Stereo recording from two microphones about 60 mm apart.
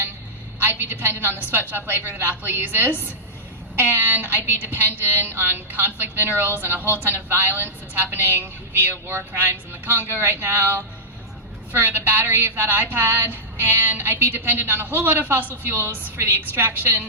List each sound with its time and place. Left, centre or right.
0.6 s a woman's voice: right